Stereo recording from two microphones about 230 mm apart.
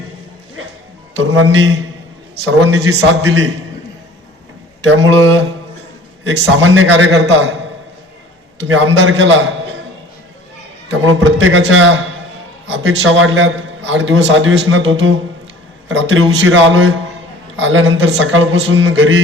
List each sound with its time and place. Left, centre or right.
1.2 s a man's voice: right
6.2 s a man's voice: right
8.6 s a man's voice: right
11.0 s a man's voice: right